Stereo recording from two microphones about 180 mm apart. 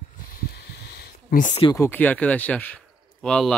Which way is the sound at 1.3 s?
45° left (ahead or behind).